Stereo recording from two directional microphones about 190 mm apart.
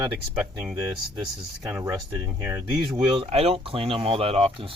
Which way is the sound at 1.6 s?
15° right (ahead or behind).